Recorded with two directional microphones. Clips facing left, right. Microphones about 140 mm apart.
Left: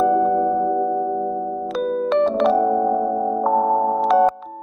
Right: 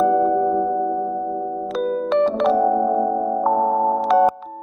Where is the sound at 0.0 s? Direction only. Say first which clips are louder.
Even; centre (ahead or behind).